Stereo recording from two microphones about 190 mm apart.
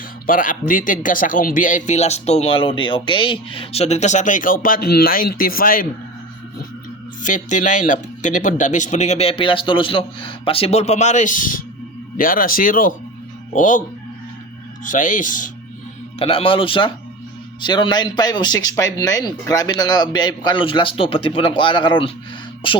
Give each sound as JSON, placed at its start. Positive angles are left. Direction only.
{"t": 0.3, "sound": "speech", "side_deg": 45}
{"t": 7.2, "sound": "speech", "side_deg": 40}
{"t": 14.8, "sound": "speech", "side_deg": 40}
{"t": 16.1, "sound": "speech", "side_deg": 30}